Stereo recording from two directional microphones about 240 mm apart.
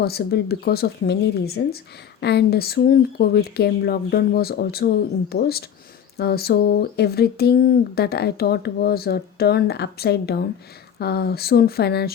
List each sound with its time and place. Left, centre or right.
0.0 s speech: left